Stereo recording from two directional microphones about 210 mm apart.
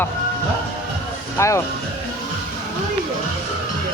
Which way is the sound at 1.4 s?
15° left (ahead or behind).